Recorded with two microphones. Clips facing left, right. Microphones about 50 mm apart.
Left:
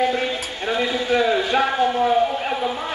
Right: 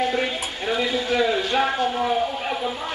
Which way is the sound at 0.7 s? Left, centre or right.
Centre.